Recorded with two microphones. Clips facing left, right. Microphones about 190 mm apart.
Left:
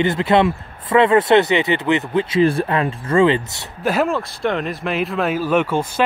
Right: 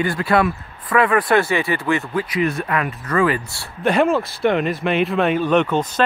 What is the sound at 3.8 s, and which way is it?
Speech, centre (ahead or behind).